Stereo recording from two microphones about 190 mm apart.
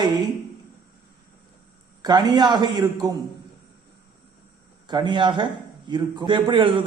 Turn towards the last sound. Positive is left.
turn(degrees=-25)  # may be behind; listen again after turning